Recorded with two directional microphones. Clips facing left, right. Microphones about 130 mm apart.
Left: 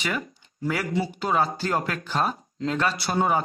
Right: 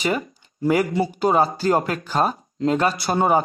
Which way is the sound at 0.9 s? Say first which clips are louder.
Right 5 dB; 40° right (ahead or behind).